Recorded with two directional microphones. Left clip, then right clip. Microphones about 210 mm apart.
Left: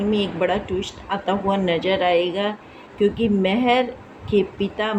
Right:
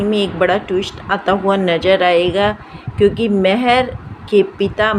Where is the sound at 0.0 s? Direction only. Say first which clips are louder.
Right 6 dB; 15° right (ahead or behind).